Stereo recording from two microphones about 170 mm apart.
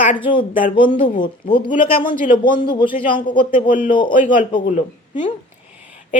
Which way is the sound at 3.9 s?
30° left (ahead or behind).